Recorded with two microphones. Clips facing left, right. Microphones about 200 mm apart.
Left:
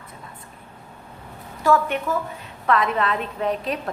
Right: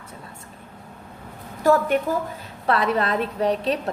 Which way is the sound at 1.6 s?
40° right (ahead or behind).